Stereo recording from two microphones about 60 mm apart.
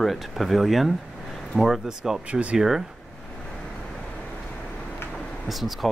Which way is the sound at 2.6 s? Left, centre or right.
Centre.